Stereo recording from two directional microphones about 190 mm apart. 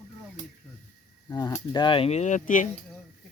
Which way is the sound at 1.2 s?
20° left (ahead or behind).